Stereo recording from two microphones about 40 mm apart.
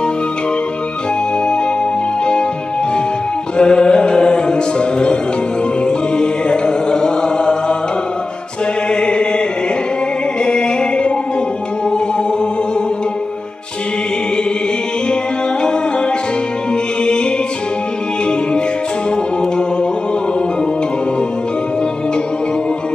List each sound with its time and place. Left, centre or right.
3.5 s music: left
8.9 s a sound: left
10.4 s music: left
17.0 s music: left